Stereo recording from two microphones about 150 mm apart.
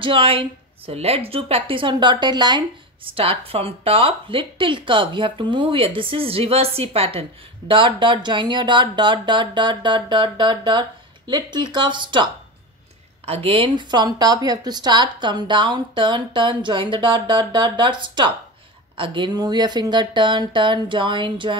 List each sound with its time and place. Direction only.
0.0 s speech: 35° right (ahead or behind)